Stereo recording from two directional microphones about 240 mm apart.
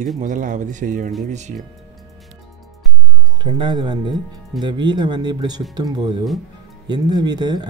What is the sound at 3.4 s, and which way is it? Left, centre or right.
Speech, centre.